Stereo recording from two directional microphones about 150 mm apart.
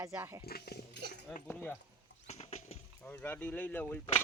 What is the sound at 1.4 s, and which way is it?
Speech, 10° left (ahead or behind).